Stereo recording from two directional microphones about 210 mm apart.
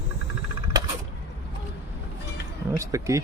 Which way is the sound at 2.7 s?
15° right (ahead or behind).